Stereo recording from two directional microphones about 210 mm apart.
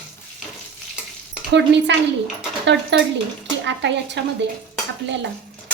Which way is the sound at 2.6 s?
55° right (ahead or behind).